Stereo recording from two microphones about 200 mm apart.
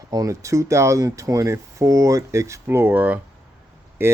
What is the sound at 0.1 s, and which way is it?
Speech, 15° right (ahead or behind).